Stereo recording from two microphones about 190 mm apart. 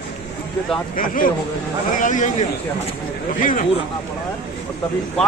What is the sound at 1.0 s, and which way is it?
Speech, 45° left (ahead or behind).